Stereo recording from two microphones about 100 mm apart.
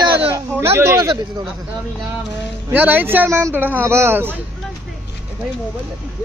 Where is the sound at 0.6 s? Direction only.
25° right (ahead or behind).